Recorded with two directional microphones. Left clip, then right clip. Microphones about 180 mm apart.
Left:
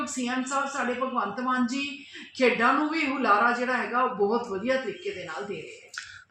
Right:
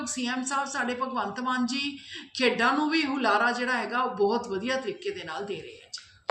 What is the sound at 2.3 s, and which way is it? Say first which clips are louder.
A woman's voice: left 2 dB; 25° right (ahead or behind).